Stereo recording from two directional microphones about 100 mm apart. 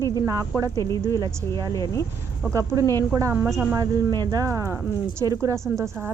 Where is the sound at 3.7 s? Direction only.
35° right (ahead or behind).